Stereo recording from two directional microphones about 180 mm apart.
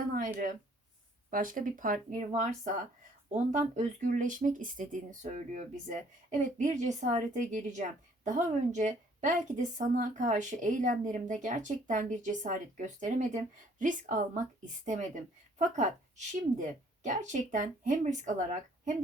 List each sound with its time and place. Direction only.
1.3 s a woman's voice: 50° right (ahead or behind)